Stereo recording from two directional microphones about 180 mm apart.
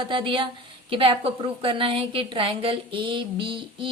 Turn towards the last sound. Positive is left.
turn(degrees=-30)  # may be behind; listen again after turning